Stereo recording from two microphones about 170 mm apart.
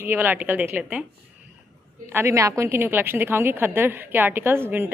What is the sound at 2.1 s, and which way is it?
A woman's voice, 15° right (ahead or behind).